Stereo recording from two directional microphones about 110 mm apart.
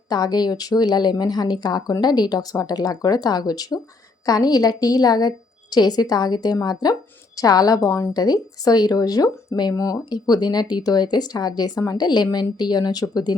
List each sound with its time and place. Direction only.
0.1 s speech: 40° left (ahead or behind)
8.1 s speech: 35° left (ahead or behind)